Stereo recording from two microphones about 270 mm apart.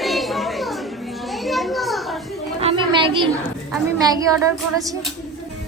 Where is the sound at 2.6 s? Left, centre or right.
Centre.